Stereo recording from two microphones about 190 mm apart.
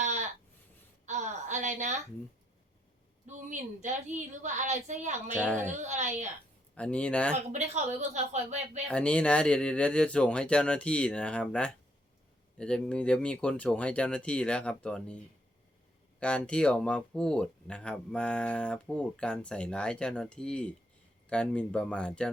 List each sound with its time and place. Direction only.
1.0 s a sound: 40° right (ahead or behind)
3.2 s a woman's voice: 40° right (ahead or behind)
6.7 s speech: 5° left (ahead or behind)
7.3 s a woman's voice: 35° right (ahead or behind)
8.9 s speech: 5° left (ahead or behind)
16.2 s speech: 5° left (ahead or behind)